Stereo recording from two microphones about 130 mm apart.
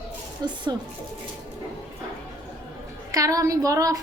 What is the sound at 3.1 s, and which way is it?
Speech, 25° right (ahead or behind).